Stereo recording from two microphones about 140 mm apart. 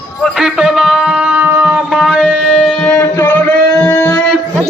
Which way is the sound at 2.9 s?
15° left (ahead or behind).